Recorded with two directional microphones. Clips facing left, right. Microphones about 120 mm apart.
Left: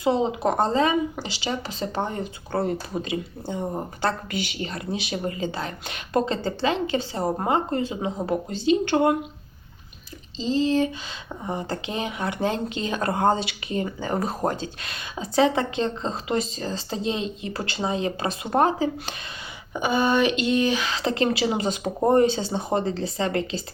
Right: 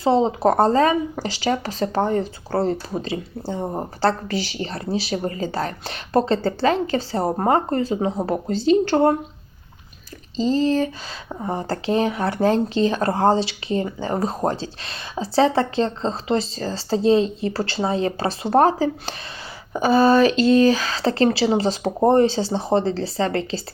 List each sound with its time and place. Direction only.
0.0 s speech: 35° right (ahead or behind)
10.3 s a sound: 45° right (ahead or behind)
11.3 s speech: 35° right (ahead or behind)